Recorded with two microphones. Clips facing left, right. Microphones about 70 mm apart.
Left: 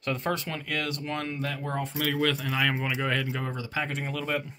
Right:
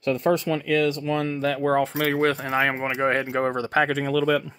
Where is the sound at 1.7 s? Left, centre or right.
Right.